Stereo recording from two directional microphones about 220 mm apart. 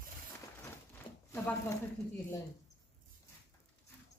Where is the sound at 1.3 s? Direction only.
10° left (ahead or behind).